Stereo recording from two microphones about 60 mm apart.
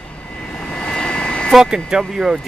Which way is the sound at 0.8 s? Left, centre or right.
Centre.